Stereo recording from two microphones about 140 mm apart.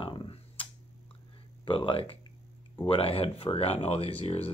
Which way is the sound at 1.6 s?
40° left (ahead or behind).